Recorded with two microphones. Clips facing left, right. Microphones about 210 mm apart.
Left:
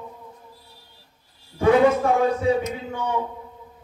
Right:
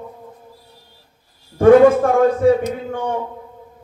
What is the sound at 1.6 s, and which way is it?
A man's voice, 50° right (ahead or behind).